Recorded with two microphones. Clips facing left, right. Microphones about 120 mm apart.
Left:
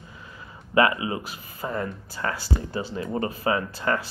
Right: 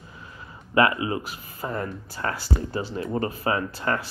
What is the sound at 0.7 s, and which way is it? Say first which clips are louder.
Speech: even; 25° left (ahead or behind).